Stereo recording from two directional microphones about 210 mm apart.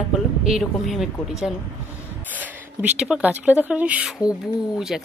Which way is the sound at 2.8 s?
5° right (ahead or behind).